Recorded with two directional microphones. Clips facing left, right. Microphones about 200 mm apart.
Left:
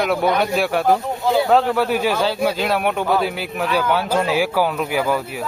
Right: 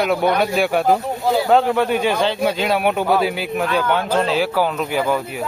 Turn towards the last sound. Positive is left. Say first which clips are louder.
# even
turn(degrees=10)  # may be behind; listen again after turning